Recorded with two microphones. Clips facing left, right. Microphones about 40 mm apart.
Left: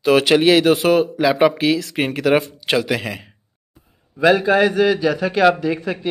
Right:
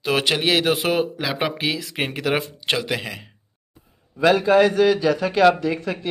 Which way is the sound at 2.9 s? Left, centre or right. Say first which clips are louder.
Left 4 dB; centre.